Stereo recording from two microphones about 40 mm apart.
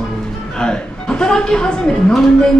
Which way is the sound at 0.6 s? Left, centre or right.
Left.